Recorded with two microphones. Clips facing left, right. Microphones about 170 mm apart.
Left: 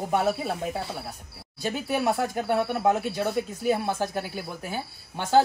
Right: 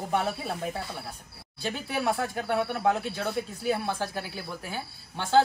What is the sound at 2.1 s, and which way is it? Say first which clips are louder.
Speech: left 3 dB; 15° left (ahead or behind).